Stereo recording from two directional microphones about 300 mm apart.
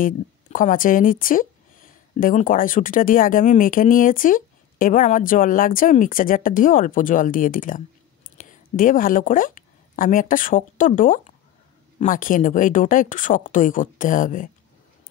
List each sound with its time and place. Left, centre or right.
0.0 s a woman's voice: left